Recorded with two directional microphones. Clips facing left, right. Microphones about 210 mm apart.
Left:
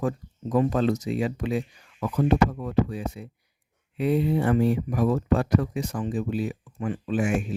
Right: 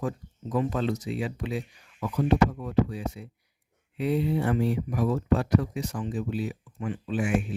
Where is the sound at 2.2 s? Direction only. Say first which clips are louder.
Left 1 dB; 60° left (ahead or behind); by 7.5 s 45° left (ahead or behind).